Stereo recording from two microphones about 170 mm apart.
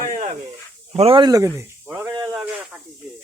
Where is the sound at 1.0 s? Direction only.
30° right (ahead or behind).